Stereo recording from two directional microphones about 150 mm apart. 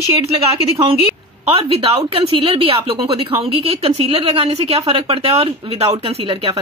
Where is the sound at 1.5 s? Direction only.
40° right (ahead or behind).